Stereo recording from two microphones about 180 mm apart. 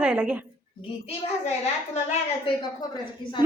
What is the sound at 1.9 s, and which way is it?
Speech, 40° left (ahead or behind).